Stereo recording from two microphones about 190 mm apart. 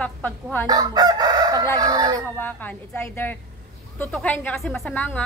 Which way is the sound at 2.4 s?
10° left (ahead or behind).